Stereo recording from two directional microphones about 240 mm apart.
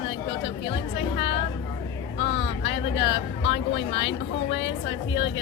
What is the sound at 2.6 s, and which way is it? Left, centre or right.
Speech, left.